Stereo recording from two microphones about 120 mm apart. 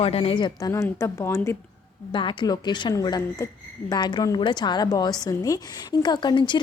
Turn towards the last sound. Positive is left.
turn(degrees=40)  # may be behind; listen again after turning